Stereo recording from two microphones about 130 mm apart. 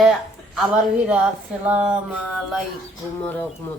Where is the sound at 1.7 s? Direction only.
10° right (ahead or behind).